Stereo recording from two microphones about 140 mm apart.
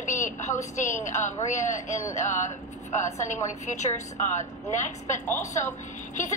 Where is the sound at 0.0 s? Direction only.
65° left (ahead or behind).